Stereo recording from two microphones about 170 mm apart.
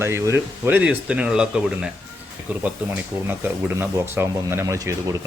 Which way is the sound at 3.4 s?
15° right (ahead or behind).